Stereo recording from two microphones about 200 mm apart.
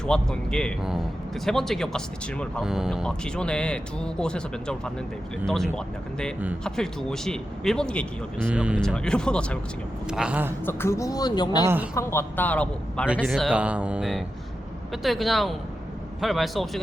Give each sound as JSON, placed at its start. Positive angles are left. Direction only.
{"t": 0.0, "sound": "speech", "side_deg": 5}
{"t": 8.4, "sound": "speech", "side_deg": -5}
{"t": 10.7, "sound": "speech", "side_deg": 10}
{"t": 11.6, "sound": "a man's voice", "side_deg": -10}
{"t": 11.9, "sound": "a man's voice", "side_deg": 10}